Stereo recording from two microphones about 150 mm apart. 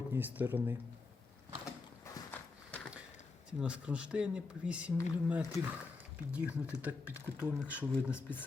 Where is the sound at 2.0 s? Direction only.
15° left (ahead or behind).